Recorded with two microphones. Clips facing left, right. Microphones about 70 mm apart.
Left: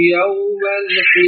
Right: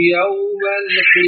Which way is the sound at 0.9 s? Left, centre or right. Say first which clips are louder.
Right 3 dB; right.